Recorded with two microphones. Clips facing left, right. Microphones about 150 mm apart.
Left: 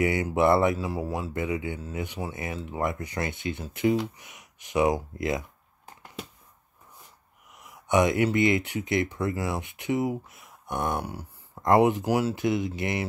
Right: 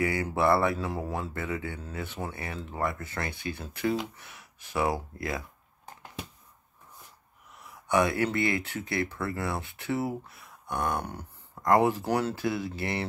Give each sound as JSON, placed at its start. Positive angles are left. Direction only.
{"t": 0.0, "sound": "speech", "side_deg": 20}
{"t": 0.7, "sound": "speech", "side_deg": 5}
{"t": 1.3, "sound": "speech", "side_deg": 15}
{"t": 7.9, "sound": "speech", "side_deg": 20}
{"t": 11.0, "sound": "a sound", "side_deg": 10}
{"t": 11.6, "sound": "speech", "side_deg": 20}
{"t": 12.1, "sound": "speech", "side_deg": 5}
{"t": 12.4, "sound": "speech", "side_deg": 20}